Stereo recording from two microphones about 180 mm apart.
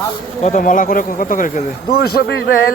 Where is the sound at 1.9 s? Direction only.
65° left (ahead or behind).